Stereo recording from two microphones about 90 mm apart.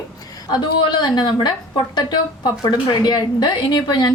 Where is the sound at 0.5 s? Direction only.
55° left (ahead or behind).